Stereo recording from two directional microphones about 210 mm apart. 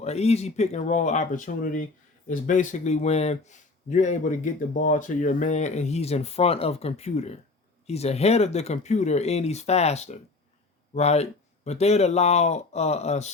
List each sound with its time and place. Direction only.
0.0 s speech: 30° left (ahead or behind)